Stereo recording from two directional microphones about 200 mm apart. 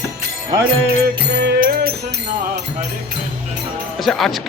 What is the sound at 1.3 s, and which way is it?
Music, 55° right (ahead or behind).